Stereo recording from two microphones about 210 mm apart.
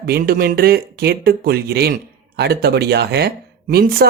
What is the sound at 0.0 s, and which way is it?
Speech, 45° right (ahead or behind).